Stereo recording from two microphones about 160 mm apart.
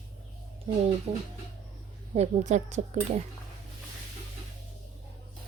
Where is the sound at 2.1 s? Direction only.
45° right (ahead or behind).